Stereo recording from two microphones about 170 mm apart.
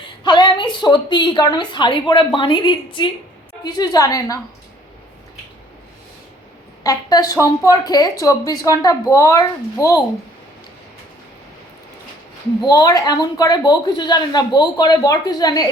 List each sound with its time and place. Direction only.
0.0 s speech: 25° left (ahead or behind)
6.8 s speech: 20° left (ahead or behind)
12.6 s speech: 25° left (ahead or behind)